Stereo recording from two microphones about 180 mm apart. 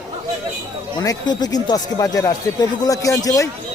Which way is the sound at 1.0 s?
20° left (ahead or behind).